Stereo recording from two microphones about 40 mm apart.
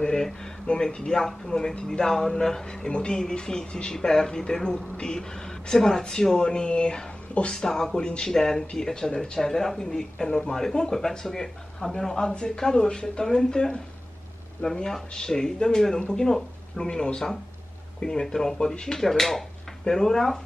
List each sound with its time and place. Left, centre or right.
0.0 s speech: centre
7.5 s speech: centre
14.9 s speech: centre
16.8 s speech: left